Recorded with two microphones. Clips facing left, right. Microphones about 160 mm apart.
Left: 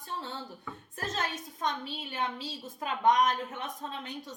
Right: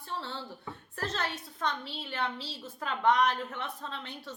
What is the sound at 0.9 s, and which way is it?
A woman's voice, 20° left (ahead or behind).